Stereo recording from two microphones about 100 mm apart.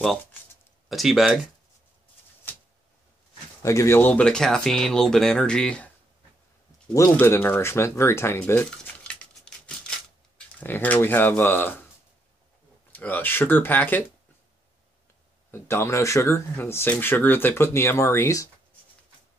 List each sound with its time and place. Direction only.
0.8 s speech: centre (ahead or behind)
3.6 s speech: 30° left (ahead or behind)
4.1 s speech: 10° left (ahead or behind)
7.2 s speech: 20° left (ahead or behind)
8.6 s a sound: 10° left (ahead or behind)
10.6 s speech: 20° left (ahead or behind)
12.9 s speech: 20° left (ahead or behind)
15.5 s speech: 25° left (ahead or behind)